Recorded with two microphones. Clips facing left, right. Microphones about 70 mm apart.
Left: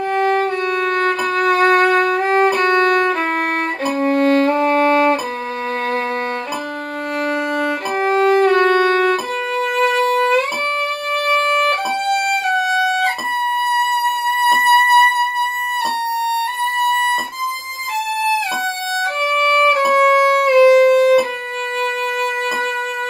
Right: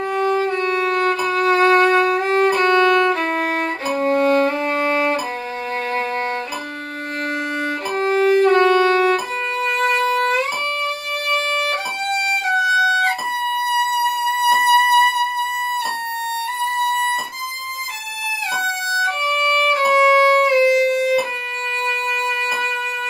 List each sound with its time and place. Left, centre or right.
0.1 s music: left
8.0 s music: left
14.4 s music: left
16.3 s music: left
19.9 s music: left